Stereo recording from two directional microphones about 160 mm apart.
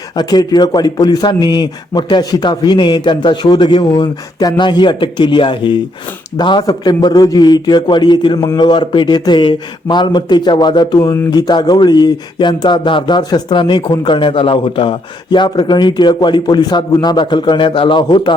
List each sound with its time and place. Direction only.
0.2 s speech: 25° left (ahead or behind)